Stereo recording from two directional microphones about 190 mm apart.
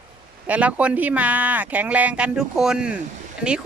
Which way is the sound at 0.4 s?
5° right (ahead or behind).